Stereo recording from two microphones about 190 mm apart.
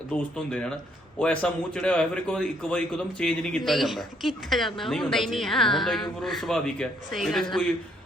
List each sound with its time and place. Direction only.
0.1 s a man's voice: 5° left (ahead or behind)